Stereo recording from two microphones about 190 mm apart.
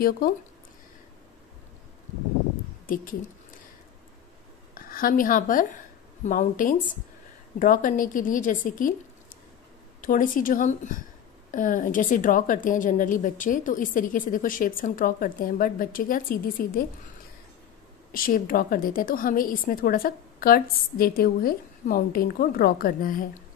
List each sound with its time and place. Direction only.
4.7 s a woman's voice: 45° left (ahead or behind)
10.0 s a woman's voice: 45° left (ahead or behind)
18.1 s a woman's voice: 50° left (ahead or behind)